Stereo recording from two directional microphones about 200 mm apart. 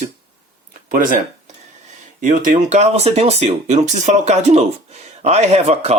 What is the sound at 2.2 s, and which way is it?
Speech, 40° right (ahead or behind).